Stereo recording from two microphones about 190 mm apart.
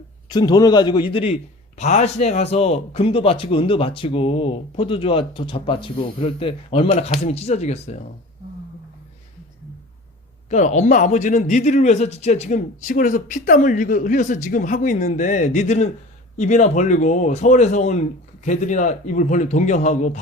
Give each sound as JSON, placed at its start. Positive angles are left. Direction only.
{"t": 0.3, "sound": "a man's voice", "side_deg": 20}
{"t": 10.5, "sound": "speech", "side_deg": 40}